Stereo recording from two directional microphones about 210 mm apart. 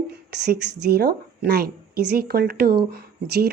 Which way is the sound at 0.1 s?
50° right (ahead or behind).